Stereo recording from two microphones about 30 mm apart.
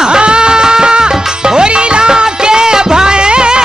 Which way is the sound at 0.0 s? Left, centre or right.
Right.